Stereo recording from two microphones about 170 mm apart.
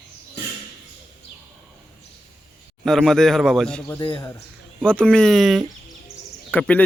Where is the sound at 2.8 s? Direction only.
Centre (ahead or behind).